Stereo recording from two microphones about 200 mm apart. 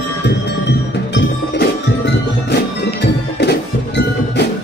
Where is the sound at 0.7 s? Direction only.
60° left (ahead or behind).